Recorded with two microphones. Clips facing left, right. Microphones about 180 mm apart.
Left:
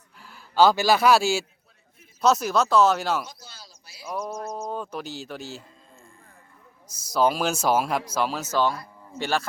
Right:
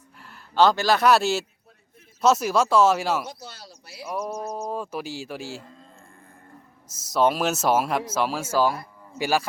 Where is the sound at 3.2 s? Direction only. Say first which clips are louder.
Right 7 dB; 65° right (ahead or behind).